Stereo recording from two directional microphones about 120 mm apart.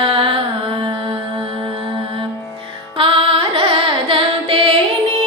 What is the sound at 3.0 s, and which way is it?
Carnatic music, 50° right (ahead or behind).